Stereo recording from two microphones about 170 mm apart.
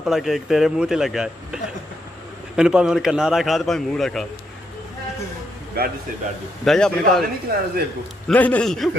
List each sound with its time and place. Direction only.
0.0 s a man's voice: centre (ahead or behind)
5.8 s speech: 65° right (ahead or behind)
6.6 s a man's voice: centre (ahead or behind)
7.5 s speech: 60° right (ahead or behind)
8.3 s a man's voice: 10° left (ahead or behind)